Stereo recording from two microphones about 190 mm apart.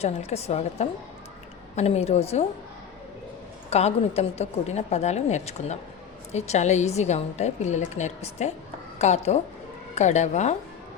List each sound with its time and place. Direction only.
0.0 s a woman's voice: 35° left (ahead or behind)
3.7 s a woman's voice: 35° left (ahead or behind)